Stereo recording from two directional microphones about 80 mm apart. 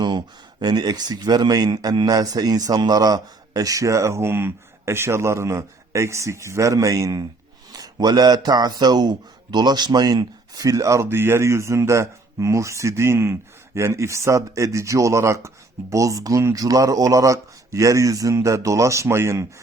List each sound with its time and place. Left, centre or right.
0.0 s speech: right